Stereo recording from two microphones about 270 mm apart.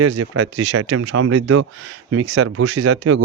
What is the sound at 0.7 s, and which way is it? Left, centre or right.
Speech, right.